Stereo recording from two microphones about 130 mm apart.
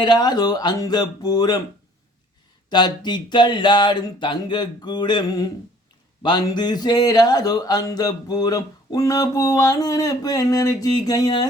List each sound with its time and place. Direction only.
0.0 s speech: 30° left (ahead or behind)
2.6 s speech: 35° left (ahead or behind)